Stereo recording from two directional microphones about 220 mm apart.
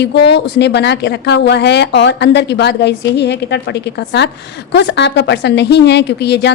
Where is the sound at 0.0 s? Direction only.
50° left (ahead or behind).